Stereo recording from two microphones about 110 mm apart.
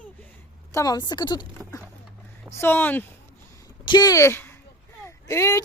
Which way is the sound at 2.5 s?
20° left (ahead or behind).